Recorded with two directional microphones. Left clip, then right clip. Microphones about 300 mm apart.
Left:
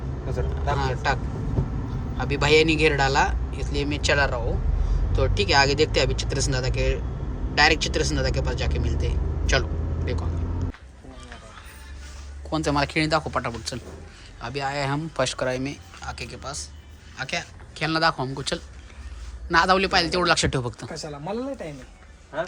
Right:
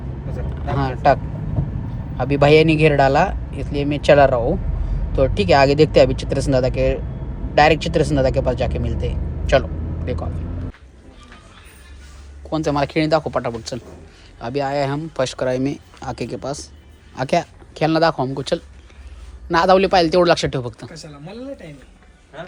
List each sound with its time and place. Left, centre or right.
0.8 s speech: centre
12.5 s speech: centre
20.9 s speech: left